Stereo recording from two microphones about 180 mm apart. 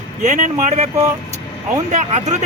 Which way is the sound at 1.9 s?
40° right (ahead or behind).